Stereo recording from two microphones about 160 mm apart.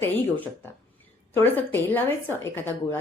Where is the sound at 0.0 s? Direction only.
10° left (ahead or behind).